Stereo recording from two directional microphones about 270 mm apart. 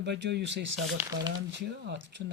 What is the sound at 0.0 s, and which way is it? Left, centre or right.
Speech, right.